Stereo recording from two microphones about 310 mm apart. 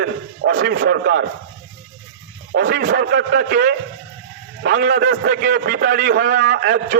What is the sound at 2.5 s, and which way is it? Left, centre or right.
A man's voice, right.